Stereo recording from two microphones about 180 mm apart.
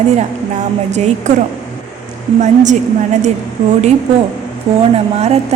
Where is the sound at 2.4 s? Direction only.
40° right (ahead or behind).